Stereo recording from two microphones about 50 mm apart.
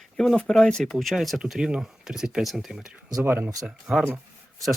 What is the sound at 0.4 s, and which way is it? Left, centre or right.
Speech, centre.